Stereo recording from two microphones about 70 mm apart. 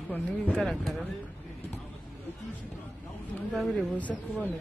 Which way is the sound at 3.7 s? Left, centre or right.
Left.